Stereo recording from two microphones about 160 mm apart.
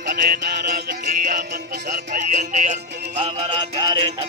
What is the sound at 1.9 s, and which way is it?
Music, 50° right (ahead or behind).